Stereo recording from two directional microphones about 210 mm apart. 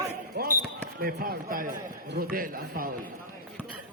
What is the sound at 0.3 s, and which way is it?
A man's voice, 45° right (ahead or behind).